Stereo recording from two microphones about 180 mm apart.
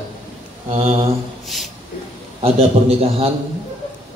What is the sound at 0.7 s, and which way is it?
Speech, 35° right (ahead or behind).